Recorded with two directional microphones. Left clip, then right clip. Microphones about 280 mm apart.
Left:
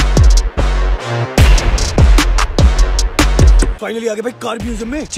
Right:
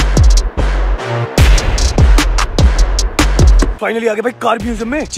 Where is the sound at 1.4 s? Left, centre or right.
Centre.